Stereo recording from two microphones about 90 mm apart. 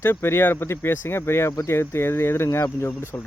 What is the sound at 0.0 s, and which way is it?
Speech, 25° left (ahead or behind).